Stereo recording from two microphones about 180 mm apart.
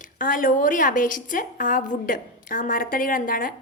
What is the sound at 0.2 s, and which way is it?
A woman's voice, 50° left (ahead or behind).